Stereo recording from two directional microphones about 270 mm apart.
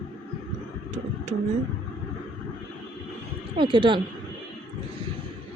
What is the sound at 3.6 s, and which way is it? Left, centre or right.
Speech, centre.